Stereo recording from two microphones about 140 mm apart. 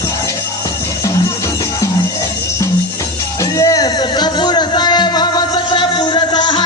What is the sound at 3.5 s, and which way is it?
Music, 25° left (ahead or behind).